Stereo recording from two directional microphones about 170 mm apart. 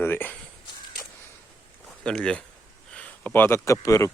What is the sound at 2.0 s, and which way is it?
Speech, 5° left (ahead or behind).